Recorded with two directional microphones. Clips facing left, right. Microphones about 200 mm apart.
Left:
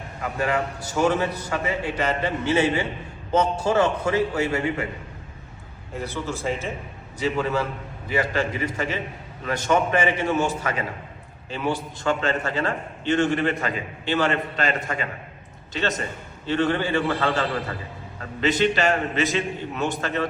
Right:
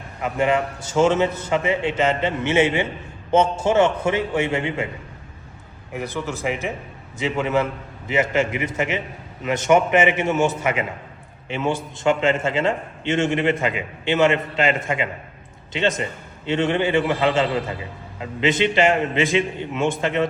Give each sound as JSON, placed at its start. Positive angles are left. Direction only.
{"t": 0.2, "sound": "a man's voice", "side_deg": -20}
{"t": 5.9, "sound": "a man's voice", "side_deg": -15}